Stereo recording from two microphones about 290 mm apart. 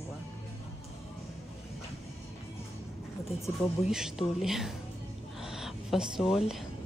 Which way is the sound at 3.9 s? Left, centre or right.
Centre.